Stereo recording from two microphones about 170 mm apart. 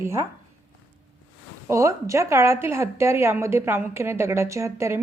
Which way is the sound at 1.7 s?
15° right (ahead or behind).